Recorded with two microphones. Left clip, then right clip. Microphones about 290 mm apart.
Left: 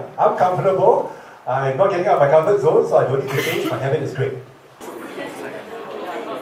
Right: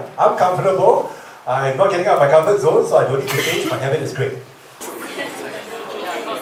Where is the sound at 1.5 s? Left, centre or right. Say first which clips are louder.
Right 2 dB; centre.